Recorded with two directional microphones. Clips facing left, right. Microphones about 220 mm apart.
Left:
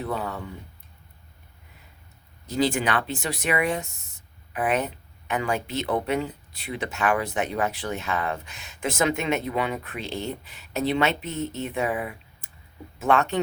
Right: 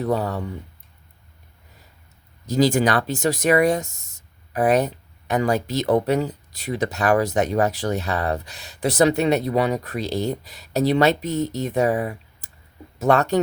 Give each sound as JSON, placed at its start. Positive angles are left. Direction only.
{"t": 0.0, "sound": "speech", "side_deg": -40}
{"t": 2.5, "sound": "speech", "side_deg": -40}